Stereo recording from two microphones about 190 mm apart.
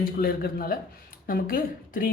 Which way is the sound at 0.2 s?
50° left (ahead or behind).